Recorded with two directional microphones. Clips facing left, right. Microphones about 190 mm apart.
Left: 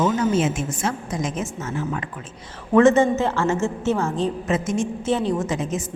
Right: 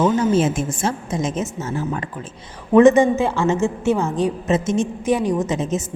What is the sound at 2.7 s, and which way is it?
A woman's voice, 15° right (ahead or behind).